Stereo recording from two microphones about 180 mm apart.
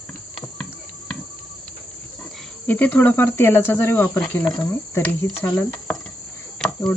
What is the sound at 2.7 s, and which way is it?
Speech, 10° left (ahead or behind).